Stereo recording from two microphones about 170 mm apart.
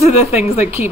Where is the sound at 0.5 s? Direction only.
15° right (ahead or behind).